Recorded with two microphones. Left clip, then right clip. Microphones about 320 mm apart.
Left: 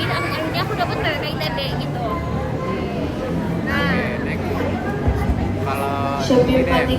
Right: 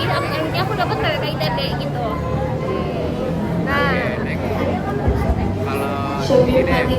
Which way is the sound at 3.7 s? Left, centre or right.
Centre.